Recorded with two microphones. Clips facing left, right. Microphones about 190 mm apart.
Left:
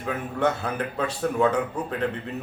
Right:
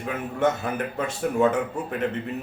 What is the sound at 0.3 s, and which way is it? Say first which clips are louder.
A man's voice: right 1 dB; 20° right (ahead or behind).